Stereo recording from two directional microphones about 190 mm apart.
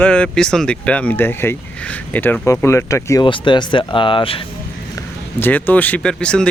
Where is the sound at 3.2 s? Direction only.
25° left (ahead or behind).